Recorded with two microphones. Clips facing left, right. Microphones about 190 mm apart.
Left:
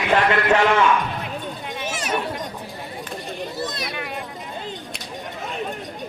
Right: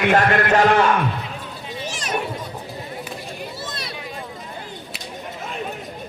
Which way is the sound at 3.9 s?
65° left (ahead or behind).